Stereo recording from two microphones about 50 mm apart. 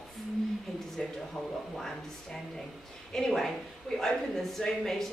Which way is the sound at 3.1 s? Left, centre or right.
Centre.